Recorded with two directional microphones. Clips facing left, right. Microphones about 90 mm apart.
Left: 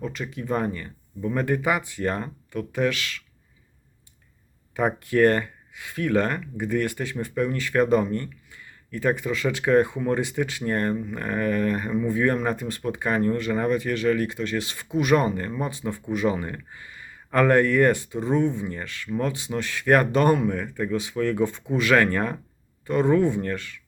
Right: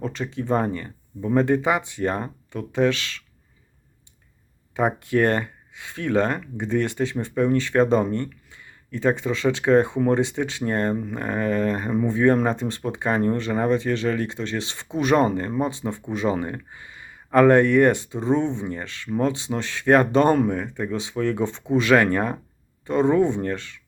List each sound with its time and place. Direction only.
0.0 s speech: 30° right (ahead or behind)
4.7 s speech: 20° right (ahead or behind)